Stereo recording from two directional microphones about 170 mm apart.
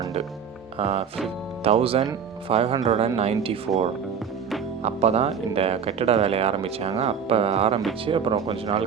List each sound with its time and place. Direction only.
0.8 s speech: 35° right (ahead or behind)
4.8 s speech: 40° right (ahead or behind)